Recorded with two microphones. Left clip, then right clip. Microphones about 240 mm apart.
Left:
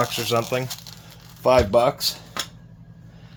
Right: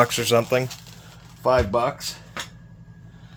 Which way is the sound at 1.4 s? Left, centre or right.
Left.